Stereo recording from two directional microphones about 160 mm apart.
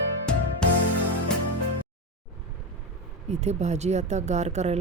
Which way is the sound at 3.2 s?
45° right (ahead or behind).